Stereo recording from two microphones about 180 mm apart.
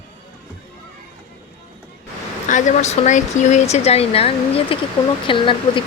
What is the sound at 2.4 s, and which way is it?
Speech, 45° left (ahead or behind).